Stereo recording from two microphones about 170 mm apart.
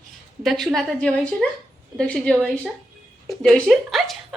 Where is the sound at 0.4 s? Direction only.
Centre (ahead or behind).